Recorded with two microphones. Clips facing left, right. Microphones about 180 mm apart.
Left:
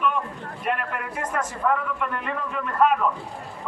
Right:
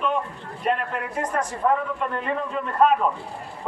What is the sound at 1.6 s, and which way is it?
A man's voice, 30° right (ahead or behind).